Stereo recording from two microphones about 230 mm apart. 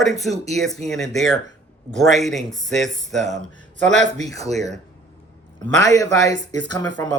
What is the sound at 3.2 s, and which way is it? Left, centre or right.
Speech, right.